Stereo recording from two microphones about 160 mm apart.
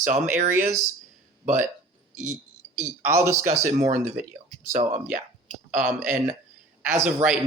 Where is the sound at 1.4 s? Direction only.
50° right (ahead or behind).